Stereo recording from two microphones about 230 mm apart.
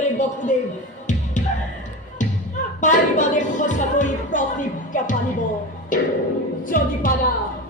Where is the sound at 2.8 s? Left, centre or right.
Left.